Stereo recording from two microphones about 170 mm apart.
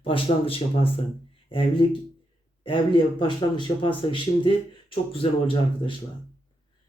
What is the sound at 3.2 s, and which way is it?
A man's voice, 30° left (ahead or behind).